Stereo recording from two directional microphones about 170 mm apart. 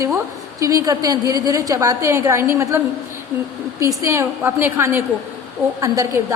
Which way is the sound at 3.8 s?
15° right (ahead or behind).